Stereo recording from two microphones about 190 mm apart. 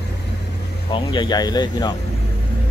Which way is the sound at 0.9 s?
25° left (ahead or behind).